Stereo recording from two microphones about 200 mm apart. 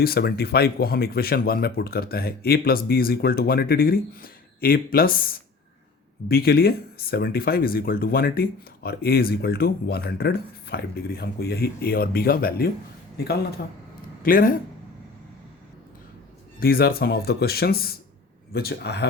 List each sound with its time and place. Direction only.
0.0 s speech: 50° left (ahead or behind)
16.6 s speech: 50° left (ahead or behind)